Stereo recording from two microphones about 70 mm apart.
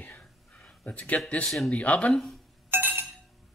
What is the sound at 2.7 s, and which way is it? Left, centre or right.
Chink, right.